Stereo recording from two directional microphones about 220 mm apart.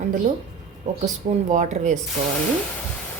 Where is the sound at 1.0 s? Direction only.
35° right (ahead or behind).